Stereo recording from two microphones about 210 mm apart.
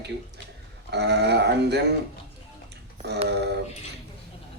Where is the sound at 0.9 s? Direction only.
50° right (ahead or behind).